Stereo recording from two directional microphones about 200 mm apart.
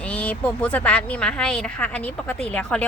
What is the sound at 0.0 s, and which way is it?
Speech, 5° left (ahead or behind).